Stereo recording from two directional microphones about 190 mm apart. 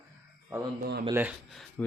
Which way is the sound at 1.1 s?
10° right (ahead or behind).